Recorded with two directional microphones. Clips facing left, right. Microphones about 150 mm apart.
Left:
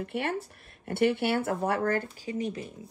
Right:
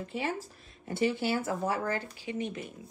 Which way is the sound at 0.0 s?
60° left (ahead or behind).